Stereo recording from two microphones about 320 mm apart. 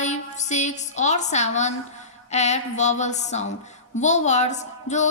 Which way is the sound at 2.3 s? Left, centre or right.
Left.